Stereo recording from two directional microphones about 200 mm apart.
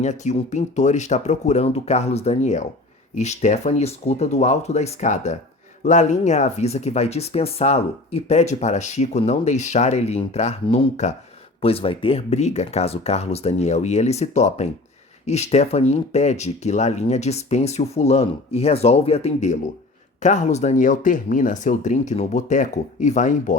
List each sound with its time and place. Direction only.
0.0 s speech: 35° left (ahead or behind)